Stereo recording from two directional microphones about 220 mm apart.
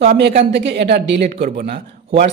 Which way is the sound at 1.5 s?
40° right (ahead or behind).